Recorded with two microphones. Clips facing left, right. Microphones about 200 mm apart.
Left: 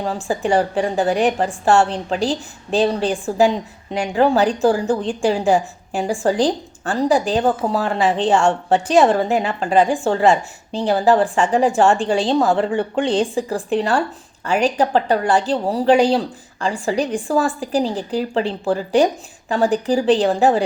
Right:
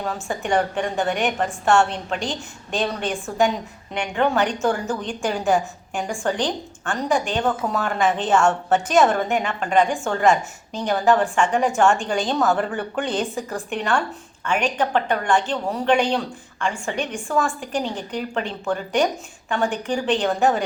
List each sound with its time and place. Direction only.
0.0 s a woman's voice: 30° left (ahead or behind)